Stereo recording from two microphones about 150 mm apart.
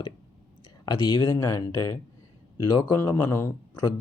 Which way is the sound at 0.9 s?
25° left (ahead or behind).